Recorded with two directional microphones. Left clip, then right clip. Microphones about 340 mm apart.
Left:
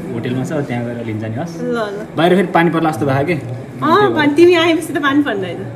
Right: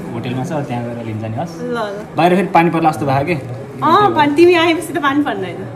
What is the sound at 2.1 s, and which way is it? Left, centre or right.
A man's voice, right.